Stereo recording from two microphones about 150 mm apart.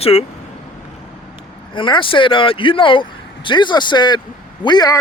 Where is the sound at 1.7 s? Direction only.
35° left (ahead or behind).